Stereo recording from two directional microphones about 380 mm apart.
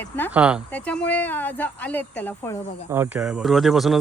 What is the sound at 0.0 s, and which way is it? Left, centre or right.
Speech, centre.